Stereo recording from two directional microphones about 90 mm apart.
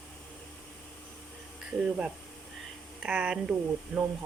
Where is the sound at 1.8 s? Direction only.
10° right (ahead or behind).